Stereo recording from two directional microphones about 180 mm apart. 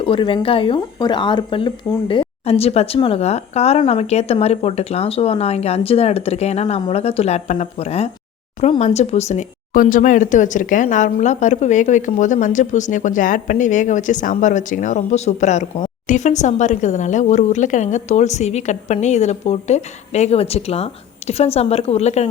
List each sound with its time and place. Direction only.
0.0 s speech: 30° left (ahead or behind)